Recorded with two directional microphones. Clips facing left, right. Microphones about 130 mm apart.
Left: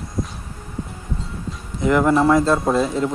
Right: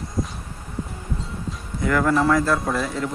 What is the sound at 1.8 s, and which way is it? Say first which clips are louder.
Speech: left 4 dB; 20° left (ahead or behind).